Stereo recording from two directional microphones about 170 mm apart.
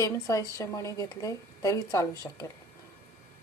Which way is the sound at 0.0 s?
20° left (ahead or behind).